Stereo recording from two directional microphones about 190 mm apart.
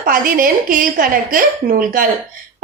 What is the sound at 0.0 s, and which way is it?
A woman's voice, 45° right (ahead or behind).